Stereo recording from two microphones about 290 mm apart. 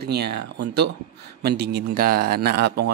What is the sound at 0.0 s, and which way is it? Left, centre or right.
Speech, right.